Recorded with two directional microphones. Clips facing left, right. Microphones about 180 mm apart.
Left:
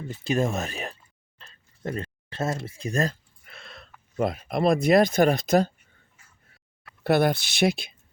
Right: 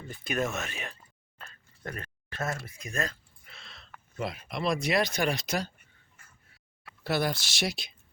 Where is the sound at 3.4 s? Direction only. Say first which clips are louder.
Left 7 dB; 55° left (ahead or behind).